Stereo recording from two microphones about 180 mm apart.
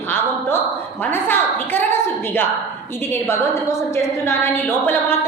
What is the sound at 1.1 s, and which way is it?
A woman's voice, 10° left (ahead or behind).